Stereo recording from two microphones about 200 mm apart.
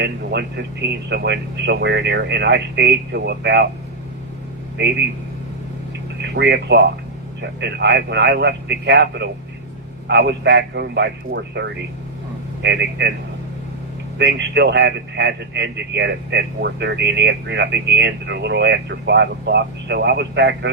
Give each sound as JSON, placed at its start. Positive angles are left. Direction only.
{"t": 0.0, "sound": "speech", "side_deg": -60}
{"t": 4.8, "sound": "speech", "side_deg": -60}
{"t": 6.2, "sound": "speech", "side_deg": -55}
{"t": 14.2, "sound": "speech", "side_deg": -60}